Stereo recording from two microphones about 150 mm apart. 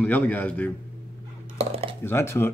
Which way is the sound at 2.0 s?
15° left (ahead or behind).